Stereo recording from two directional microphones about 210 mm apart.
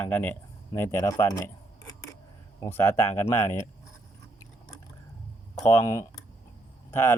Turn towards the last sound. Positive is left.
turn(degrees=10)  # may be behind; listen again after turning